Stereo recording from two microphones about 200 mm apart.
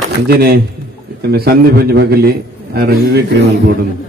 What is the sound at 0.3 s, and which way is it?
A man's voice, 50° right (ahead or behind).